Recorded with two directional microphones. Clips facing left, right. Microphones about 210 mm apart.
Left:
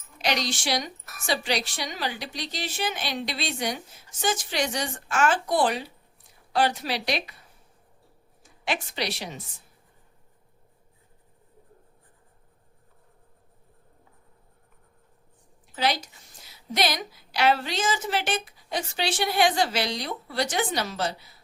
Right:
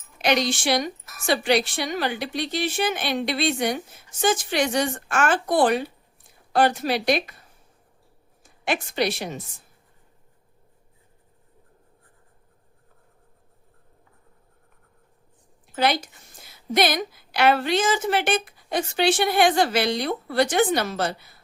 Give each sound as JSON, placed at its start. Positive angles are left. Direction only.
{"t": 0.2, "sound": "a woman's voice", "side_deg": -55}
{"t": 8.4, "sound": "a woman's voice", "side_deg": -50}
{"t": 15.7, "sound": "a woman's voice", "side_deg": -55}